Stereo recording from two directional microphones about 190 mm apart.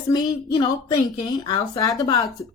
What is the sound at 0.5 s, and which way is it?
Speech, 20° left (ahead or behind).